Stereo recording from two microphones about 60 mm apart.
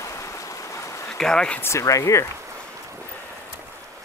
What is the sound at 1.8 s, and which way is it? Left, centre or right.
Speech, left.